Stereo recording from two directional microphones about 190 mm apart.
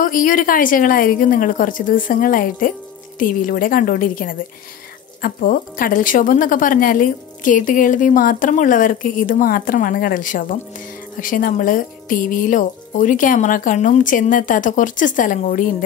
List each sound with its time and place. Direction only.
0.0 s a woman's voice: 45° left (ahead or behind)